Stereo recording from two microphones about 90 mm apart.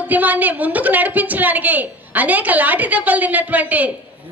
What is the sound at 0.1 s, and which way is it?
A woman's voice, 20° right (ahead or behind).